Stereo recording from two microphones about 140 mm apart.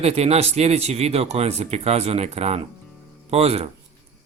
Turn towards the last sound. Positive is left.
turn(degrees=-45)  # may be behind; listen again after turning